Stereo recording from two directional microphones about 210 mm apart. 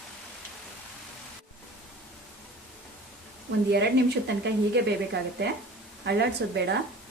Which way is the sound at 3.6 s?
55° right (ahead or behind).